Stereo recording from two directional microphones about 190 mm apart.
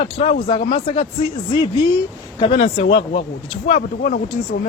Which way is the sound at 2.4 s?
30° left (ahead or behind).